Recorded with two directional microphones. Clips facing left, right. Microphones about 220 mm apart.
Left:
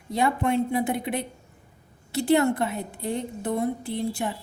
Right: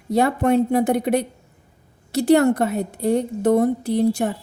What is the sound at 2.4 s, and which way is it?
Speech, 45° right (ahead or behind).